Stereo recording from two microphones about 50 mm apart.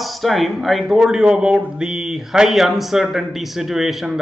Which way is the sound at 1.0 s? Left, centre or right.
Centre.